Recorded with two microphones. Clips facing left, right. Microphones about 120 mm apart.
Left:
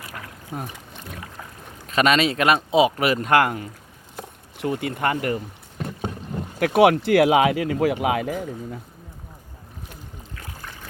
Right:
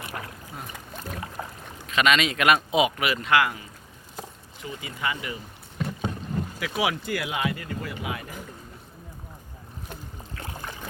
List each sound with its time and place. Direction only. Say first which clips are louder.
0.0 s boat: right 2 dB; 25° right (ahead or behind)
0.5 s speech: left 9 dB; 55° left (ahead or behind)
0.9 s boat: right 6 dB; 40° right (ahead or behind)
1.9 s speech: left 4 dB; 40° left (ahead or behind)
4.2 s speech: left 9 dB; 65° left (ahead or behind)
6.6 s speech: left 13 dB; 60° left (ahead or behind); by 8.8 s 90° left
10.3 s boat: right 3 dB; 25° right (ahead or behind)